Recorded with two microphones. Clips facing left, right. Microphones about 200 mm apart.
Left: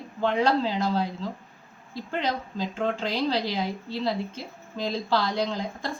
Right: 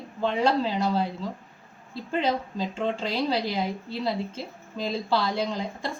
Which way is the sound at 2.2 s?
5° right (ahead or behind).